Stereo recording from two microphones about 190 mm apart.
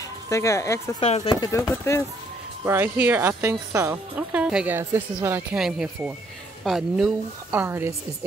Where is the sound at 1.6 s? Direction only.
15° left (ahead or behind).